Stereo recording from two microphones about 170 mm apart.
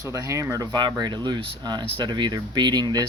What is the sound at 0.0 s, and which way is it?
Speech, 20° right (ahead or behind).